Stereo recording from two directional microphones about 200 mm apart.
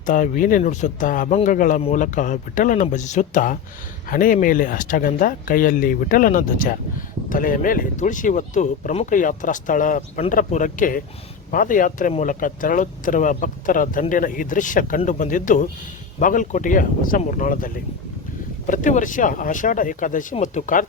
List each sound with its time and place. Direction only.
0.0 s speech: 40° left (ahead or behind)
18.7 s speech: 40° left (ahead or behind)